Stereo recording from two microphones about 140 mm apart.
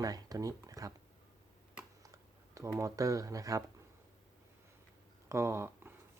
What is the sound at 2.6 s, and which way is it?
Speech, 25° right (ahead or behind).